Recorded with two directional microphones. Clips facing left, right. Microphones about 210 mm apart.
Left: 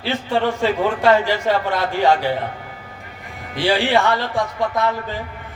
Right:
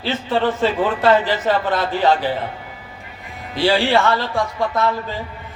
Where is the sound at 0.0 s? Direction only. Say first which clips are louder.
Right 1 dB; 15° left (ahead or behind).